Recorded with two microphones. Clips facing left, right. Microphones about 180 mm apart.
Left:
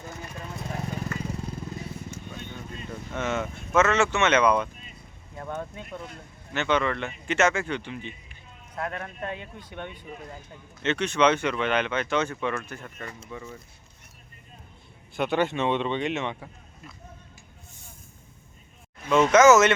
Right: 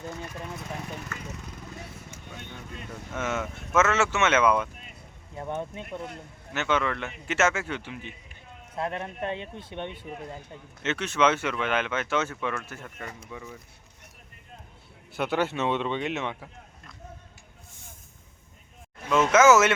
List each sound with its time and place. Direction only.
1.1 s vehicle: 30° left (ahead or behind)
3.1 s speech: 5° right (ahead or behind)
5.4 s speech: 20° right (ahead or behind)
6.5 s speech: 5° right (ahead or behind)
8.7 s speech: 25° right (ahead or behind)
10.8 s speech: 5° right (ahead or behind)
15.1 s speech: 5° right (ahead or behind)
19.0 s speech: centre (ahead or behind)